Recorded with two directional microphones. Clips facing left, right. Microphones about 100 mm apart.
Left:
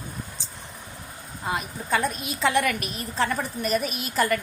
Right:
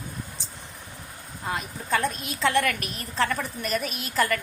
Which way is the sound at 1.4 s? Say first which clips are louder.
Left 2 dB; 10° left (ahead or behind).